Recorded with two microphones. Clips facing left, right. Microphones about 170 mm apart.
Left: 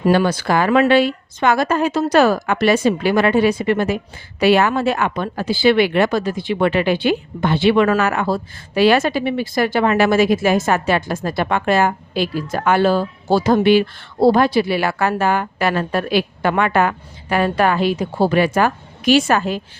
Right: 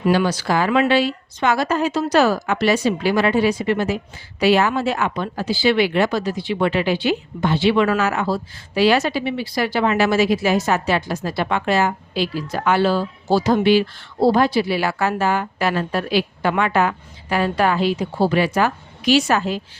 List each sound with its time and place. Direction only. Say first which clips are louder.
0.0 s a woman's voice: left 2 dB; 50° left (ahead or behind)